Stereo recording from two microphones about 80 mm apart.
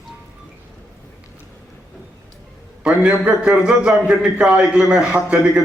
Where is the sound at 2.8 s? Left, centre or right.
Centre.